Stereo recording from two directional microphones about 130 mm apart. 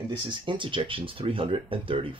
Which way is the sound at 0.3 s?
40° right (ahead or behind).